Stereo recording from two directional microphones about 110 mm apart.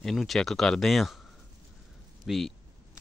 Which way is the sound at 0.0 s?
5° left (ahead or behind).